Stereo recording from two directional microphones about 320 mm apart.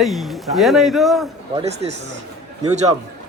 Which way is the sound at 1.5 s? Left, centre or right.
Centre.